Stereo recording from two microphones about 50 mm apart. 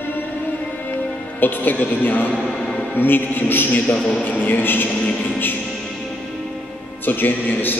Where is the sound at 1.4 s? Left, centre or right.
Left.